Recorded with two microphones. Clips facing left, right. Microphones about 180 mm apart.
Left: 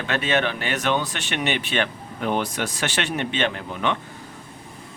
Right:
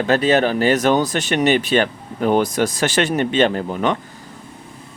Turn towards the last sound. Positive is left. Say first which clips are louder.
# right 6 dB
turn(degrees=-40)  # may be behind; listen again after turning